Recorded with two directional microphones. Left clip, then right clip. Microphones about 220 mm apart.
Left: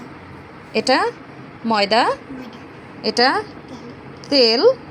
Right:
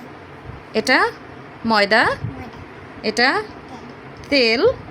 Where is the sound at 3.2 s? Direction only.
5° right (ahead or behind).